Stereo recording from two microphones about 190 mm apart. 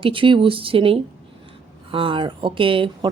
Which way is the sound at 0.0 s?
25° right (ahead or behind).